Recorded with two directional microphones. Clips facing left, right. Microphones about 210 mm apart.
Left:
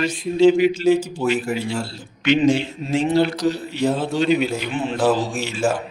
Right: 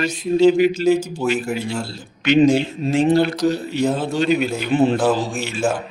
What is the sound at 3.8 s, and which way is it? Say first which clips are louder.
Speech: left 1 dB; centre (ahead or behind).